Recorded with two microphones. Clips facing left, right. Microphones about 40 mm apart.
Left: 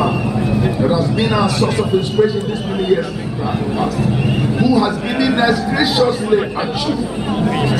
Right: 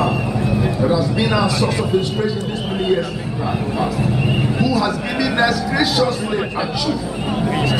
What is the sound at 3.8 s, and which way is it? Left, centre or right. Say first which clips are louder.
Speech: left 1 dB; centre.